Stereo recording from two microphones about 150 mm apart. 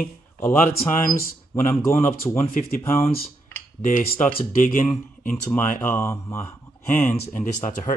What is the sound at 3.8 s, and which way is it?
Speech, 60° left (ahead or behind).